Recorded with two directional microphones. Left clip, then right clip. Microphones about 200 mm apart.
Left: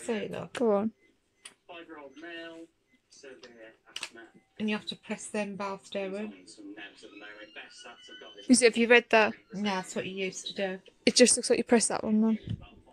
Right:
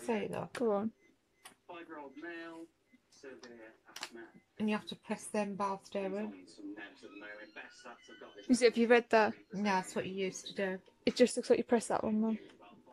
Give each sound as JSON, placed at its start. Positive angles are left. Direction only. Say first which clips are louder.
{"t": 0.0, "sound": "a woman's voice", "louder": "left 3 dB", "side_deg": 5}
{"t": 0.6, "sound": "speech", "louder": "left 7 dB", "side_deg": 25}
{"t": 4.6, "sound": "speech", "louder": "left 4 dB", "side_deg": 0}
{"t": 8.5, "sound": "speech", "louder": "left 6 dB", "side_deg": 30}
{"t": 8.7, "sound": "a woman's voice", "louder": "left 6 dB", "side_deg": 0}